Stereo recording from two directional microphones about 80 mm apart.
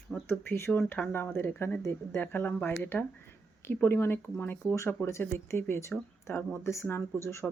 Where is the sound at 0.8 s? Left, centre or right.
Left.